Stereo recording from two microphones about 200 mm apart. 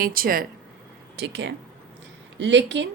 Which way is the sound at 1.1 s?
60° right (ahead or behind).